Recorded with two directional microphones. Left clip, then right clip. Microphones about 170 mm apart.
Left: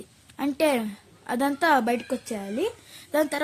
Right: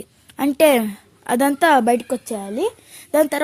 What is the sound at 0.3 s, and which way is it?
A woman's voice, 45° right (ahead or behind).